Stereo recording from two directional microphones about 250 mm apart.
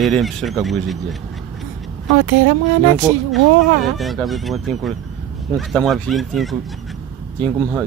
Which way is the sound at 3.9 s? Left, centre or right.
Centre.